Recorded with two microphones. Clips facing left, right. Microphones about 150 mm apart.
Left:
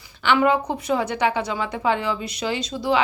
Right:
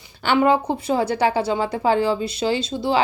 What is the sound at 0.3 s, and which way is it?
A woman's voice, 30° right (ahead or behind).